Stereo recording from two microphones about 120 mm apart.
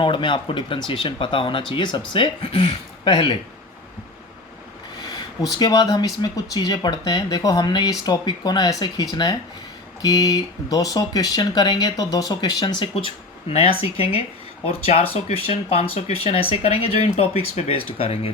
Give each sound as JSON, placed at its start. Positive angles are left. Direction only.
{"t": 0.0, "sound": "speech", "side_deg": 45}
{"t": 5.5, "sound": "speech", "side_deg": 30}
{"t": 12.8, "sound": "speech", "side_deg": 45}